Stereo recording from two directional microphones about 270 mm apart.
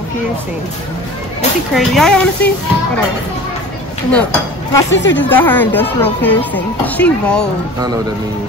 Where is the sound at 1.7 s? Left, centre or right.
Centre.